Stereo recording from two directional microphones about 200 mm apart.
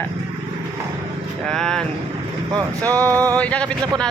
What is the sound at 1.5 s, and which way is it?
Vehicle, 5° left (ahead or behind).